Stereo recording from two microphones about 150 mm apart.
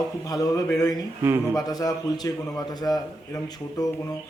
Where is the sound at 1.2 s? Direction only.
15° right (ahead or behind).